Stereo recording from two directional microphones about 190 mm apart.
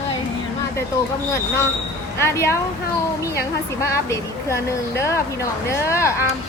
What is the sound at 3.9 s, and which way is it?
Speech, 15° left (ahead or behind).